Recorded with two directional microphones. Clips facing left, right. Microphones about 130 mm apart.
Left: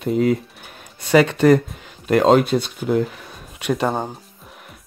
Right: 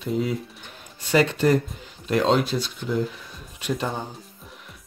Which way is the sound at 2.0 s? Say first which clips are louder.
Left 6 dB; 55° left (ahead or behind).